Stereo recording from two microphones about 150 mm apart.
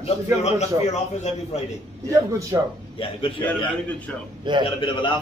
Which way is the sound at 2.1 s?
20° right (ahead or behind).